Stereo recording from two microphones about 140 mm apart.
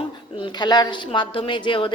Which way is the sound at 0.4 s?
30° left (ahead or behind).